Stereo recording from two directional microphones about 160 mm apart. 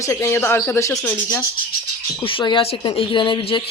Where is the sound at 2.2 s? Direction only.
30° left (ahead or behind).